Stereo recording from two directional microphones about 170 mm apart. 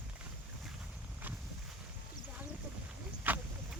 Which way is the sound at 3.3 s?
10° right (ahead or behind).